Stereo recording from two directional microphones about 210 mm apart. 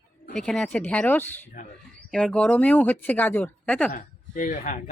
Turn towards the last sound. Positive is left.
turn(degrees=35)  # may be behind; listen again after turning